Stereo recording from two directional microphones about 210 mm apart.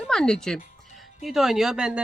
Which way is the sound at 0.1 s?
5° left (ahead or behind).